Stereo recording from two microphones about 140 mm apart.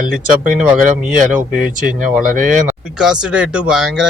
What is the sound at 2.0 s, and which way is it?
Speech, 65° right (ahead or behind).